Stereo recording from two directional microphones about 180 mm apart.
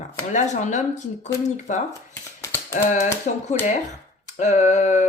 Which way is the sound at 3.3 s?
45° left (ahead or behind).